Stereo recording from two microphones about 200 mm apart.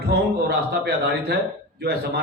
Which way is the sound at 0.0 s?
55° right (ahead or behind).